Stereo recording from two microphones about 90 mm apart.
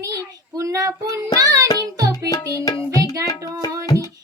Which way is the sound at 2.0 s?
40° right (ahead or behind).